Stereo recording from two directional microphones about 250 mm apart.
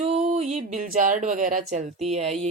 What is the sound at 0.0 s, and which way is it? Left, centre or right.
A woman's voice, right.